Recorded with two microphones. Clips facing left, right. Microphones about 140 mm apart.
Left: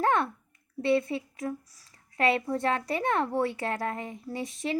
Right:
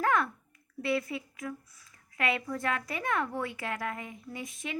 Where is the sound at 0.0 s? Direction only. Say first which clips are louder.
Left 2 dB; 30° left (ahead or behind).